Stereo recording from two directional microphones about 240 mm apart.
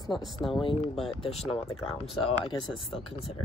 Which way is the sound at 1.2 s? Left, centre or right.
Left.